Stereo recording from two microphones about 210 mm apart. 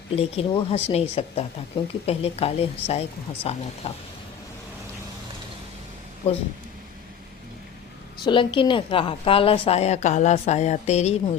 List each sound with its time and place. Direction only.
0.2 s a woman's voice: 30° left (ahead or behind)
6.2 s a woman's voice: 30° left (ahead or behind)
8.2 s a woman's voice: 25° left (ahead or behind)